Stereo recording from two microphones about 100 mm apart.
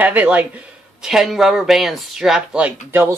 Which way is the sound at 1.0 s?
5° right (ahead or behind).